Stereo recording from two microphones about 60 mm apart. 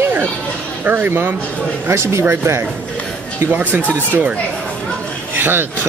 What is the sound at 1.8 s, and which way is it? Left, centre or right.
Speech, right.